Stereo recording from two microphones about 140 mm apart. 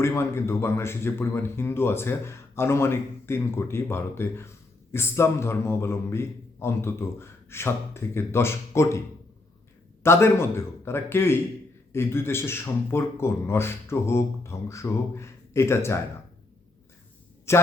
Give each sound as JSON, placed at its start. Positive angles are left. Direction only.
{"t": 0.0, "sound": "a man's voice", "side_deg": 20}
{"t": 10.0, "sound": "a man's voice", "side_deg": 20}
{"t": 17.5, "sound": "speech", "side_deg": 20}